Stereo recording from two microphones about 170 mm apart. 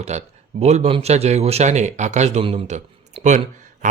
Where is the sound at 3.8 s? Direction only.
50° right (ahead or behind).